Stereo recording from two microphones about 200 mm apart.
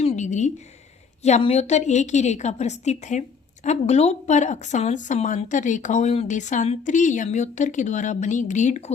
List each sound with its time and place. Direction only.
0.0 s a woman's voice: 35° left (ahead or behind)